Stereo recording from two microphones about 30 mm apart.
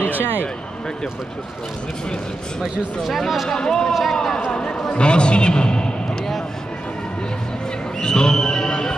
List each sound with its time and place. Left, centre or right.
0.1 s a sound: right
3.0 s speech: centre
3.4 s speech: left
4.1 s speech: centre
4.5 s a man's voice: left
8.0 s speech: left